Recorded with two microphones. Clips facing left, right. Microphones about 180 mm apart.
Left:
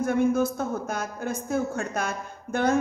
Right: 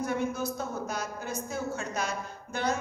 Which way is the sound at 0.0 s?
50° left (ahead or behind).